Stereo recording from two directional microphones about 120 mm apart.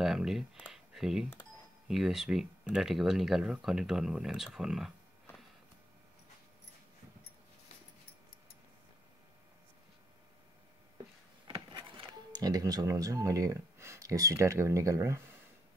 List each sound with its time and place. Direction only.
0.0 s speech: 5° right (ahead or behind)
12.3 s speech: 30° right (ahead or behind)